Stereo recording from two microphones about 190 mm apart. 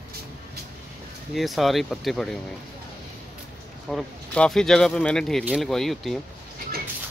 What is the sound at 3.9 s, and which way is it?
Speech, centre (ahead or behind).